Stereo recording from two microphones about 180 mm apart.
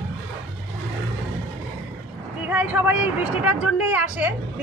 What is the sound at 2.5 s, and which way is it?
Speech, 10° right (ahead or behind).